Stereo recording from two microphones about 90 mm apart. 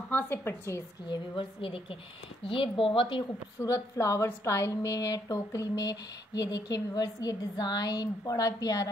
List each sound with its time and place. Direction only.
0.1 s a woman's voice: 20° left (ahead or behind)
1.0 s a woman's voice: 60° left (ahead or behind)
3.5 s a woman's voice: 30° left (ahead or behind)